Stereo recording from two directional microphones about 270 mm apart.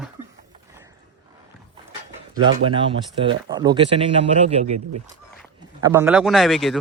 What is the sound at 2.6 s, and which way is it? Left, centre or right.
Speech, centre.